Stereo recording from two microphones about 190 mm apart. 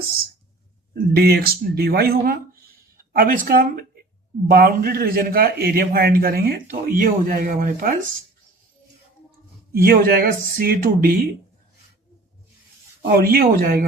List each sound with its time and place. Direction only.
0.9 s a man's voice: 55° right (ahead or behind)
9.7 s a man's voice: 50° right (ahead or behind)
13.0 s a man's voice: 55° right (ahead or behind)